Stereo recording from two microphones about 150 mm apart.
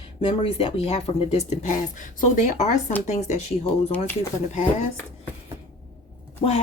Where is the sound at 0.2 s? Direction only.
35° left (ahead or behind).